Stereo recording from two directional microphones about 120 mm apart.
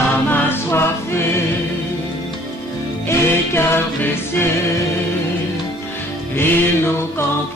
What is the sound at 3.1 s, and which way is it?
Music, 20° left (ahead or behind).